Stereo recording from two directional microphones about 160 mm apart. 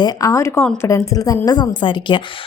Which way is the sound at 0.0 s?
25° left (ahead or behind).